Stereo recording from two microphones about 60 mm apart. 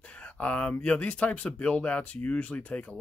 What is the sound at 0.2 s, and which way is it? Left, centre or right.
Speech, centre.